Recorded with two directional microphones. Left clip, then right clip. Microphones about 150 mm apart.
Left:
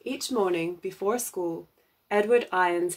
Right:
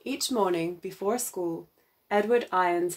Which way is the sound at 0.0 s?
25° right (ahead or behind).